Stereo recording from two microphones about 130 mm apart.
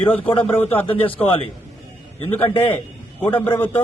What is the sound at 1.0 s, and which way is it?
Speech, 45° left (ahead or behind).